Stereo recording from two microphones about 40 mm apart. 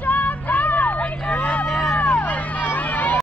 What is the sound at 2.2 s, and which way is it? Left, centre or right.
Vehicle, left.